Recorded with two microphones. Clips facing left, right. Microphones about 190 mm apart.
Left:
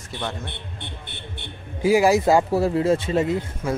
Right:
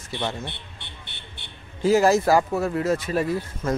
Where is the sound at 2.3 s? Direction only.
30° left (ahead or behind).